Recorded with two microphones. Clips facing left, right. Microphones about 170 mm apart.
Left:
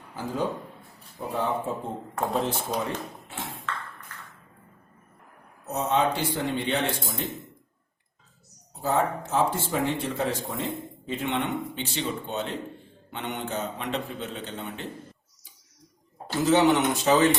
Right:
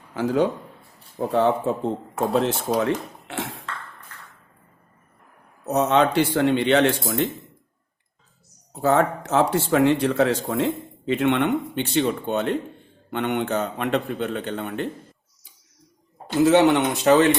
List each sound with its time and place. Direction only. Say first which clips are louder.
0.1 s a man's voice: right 10 dB; 85° right
1.2 s speech: right 8 dB; 75° right (ahead or behind)
5.6 s speech: right 6 dB; 75° right (ahead or behind)
8.7 s a man's voice: right 6 dB; 75° right (ahead or behind)
16.5 s a man's voice: right 2 dB; 65° right (ahead or behind)